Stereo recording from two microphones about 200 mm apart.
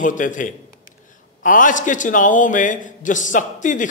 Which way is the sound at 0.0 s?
40° left (ahead or behind).